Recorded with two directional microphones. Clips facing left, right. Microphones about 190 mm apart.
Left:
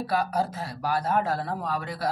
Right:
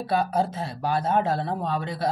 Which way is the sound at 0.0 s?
25° right (ahead or behind).